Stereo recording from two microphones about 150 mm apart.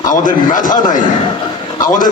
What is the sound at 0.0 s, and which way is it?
Speech, 60° left (ahead or behind).